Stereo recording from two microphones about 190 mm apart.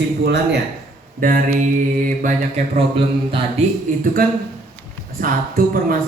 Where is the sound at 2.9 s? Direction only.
25° right (ahead or behind).